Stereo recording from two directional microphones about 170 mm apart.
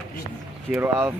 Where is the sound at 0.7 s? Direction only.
10° right (ahead or behind).